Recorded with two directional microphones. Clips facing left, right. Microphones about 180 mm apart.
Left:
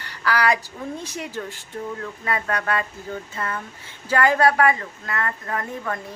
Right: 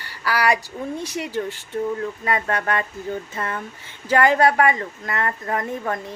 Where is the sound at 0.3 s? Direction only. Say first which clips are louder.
Right 1 dB; 10° right (ahead or behind).